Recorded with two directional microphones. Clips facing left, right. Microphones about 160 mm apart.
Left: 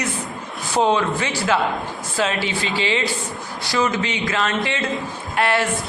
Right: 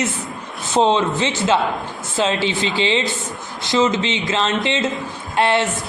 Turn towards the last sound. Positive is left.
turn(degrees=-25)  # may be behind; listen again after turning